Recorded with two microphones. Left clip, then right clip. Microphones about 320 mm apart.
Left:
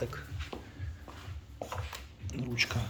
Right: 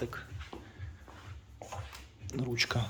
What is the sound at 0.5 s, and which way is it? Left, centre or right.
Music, left.